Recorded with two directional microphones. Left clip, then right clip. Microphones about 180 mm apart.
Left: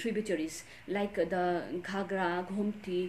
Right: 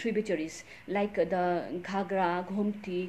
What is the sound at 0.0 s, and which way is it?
A woman's voice, 15° left (ahead or behind).